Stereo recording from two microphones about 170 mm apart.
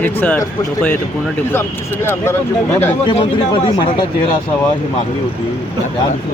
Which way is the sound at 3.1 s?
30° left (ahead or behind).